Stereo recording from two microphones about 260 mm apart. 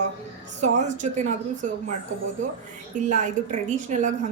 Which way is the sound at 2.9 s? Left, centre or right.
Right.